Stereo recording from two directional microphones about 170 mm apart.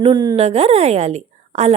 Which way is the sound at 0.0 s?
25° right (ahead or behind).